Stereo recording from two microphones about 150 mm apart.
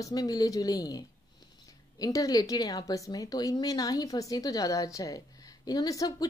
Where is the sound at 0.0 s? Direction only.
25° left (ahead or behind).